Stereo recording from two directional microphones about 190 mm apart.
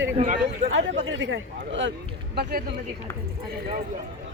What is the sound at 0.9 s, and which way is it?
Speech, 70° right (ahead or behind).